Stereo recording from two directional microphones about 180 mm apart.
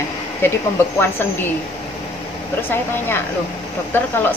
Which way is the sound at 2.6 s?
10° left (ahead or behind).